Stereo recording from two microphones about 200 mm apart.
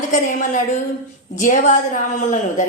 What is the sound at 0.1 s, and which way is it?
Speech, 40° left (ahead or behind).